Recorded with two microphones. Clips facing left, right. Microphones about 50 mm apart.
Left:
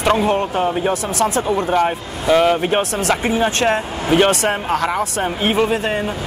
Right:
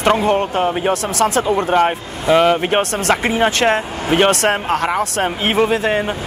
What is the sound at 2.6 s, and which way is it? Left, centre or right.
Speech, right.